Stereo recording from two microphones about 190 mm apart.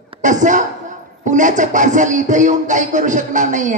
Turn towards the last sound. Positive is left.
turn(degrees=-40)  # may be behind; listen again after turning